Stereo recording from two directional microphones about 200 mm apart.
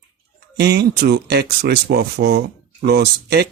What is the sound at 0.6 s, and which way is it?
Speech, 55° right (ahead or behind).